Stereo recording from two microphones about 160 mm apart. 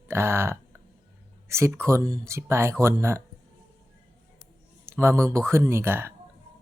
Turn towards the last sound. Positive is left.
turn(degrees=-15)  # may be behind; listen again after turning